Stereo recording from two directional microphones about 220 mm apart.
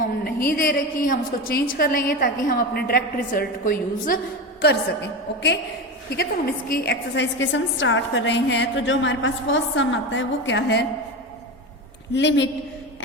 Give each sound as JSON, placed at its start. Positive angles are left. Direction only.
{"t": 0.0, "sound": "a woman's voice", "side_deg": 40}
{"t": 6.1, "sound": "a woman's voice", "side_deg": 45}
{"t": 12.1, "sound": "a woman's voice", "side_deg": 55}